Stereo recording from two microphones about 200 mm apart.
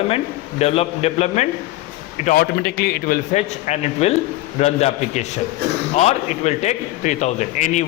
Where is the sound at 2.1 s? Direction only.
45° left (ahead or behind).